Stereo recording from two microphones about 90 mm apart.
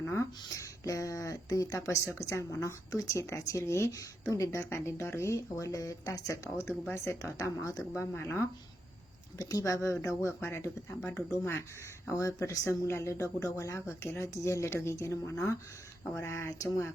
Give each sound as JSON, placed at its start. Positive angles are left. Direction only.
{"t": 0.1, "sound": "speech", "side_deg": 35}
{"t": 7.9, "sound": "speech", "side_deg": 30}
{"t": 9.4, "sound": "speech", "side_deg": 40}